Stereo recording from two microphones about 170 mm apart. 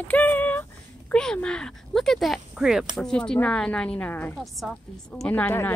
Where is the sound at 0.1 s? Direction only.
10° left (ahead or behind).